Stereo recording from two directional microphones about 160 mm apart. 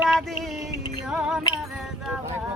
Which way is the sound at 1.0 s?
5° right (ahead or behind).